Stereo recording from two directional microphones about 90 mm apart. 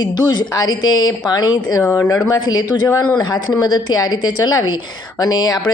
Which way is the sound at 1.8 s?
25° left (ahead or behind).